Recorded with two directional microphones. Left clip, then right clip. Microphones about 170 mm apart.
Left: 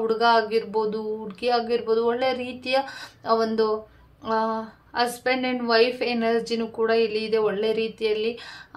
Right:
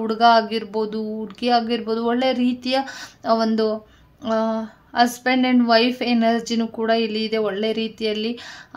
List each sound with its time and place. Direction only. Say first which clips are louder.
0.0 s a woman's voice: right 4 dB; 40° right (ahead or behind)